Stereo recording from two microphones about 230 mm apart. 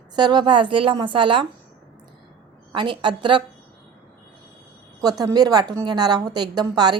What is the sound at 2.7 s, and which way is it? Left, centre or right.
Speech, right.